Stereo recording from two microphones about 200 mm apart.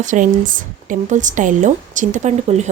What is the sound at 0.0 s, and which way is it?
A woman's voice, 40° right (ahead or behind).